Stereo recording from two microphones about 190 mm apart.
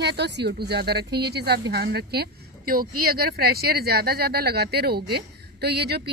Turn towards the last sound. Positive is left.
turn(degrees=-60)  # may be behind; listen again after turning